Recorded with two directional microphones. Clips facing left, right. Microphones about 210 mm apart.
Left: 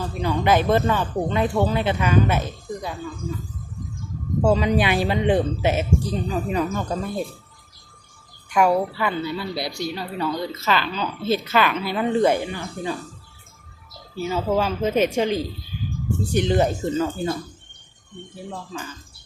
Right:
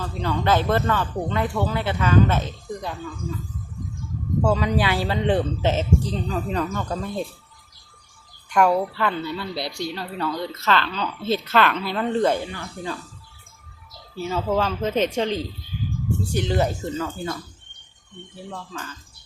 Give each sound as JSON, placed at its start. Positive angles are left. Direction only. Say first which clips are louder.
{"t": 0.0, "sound": "a woman's voice", "louder": "left 2 dB", "side_deg": 15}
{"t": 4.4, "sound": "a woman's voice", "louder": "left 3 dB", "side_deg": 20}
{"t": 8.4, "sound": "a woman's voice", "louder": "even", "side_deg": 5}
{"t": 14.2, "sound": "a woman's voice", "louder": "left 1 dB", "side_deg": 5}
{"t": 18.5, "sound": "a woman's voice", "louder": "left 2 dB", "side_deg": 10}